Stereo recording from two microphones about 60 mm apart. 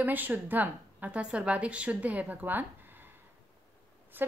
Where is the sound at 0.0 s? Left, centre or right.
Right.